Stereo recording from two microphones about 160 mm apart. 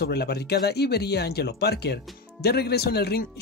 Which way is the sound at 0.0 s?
90° left.